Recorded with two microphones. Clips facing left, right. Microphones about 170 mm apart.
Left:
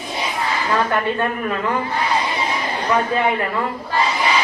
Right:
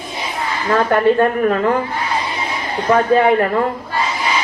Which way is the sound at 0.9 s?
45° right (ahead or behind).